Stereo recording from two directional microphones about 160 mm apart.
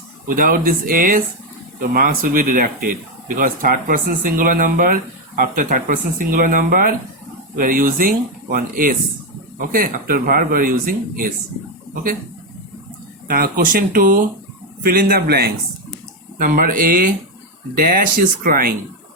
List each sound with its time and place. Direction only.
0.3 s speech: 60° right (ahead or behind)
13.2 s a man's voice: 65° right (ahead or behind)
16.4 s speech: 60° right (ahead or behind)